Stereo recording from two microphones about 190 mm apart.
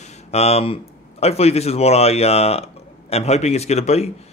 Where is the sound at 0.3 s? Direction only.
35° left (ahead or behind).